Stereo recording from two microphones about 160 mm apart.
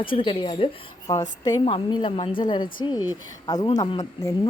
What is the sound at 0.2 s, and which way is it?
A woman's voice, 35° left (ahead or behind).